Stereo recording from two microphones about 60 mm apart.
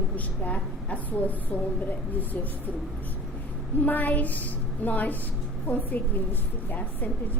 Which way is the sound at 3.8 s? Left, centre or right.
Left.